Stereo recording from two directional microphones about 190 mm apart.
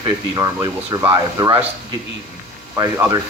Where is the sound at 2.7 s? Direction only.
10° right (ahead or behind).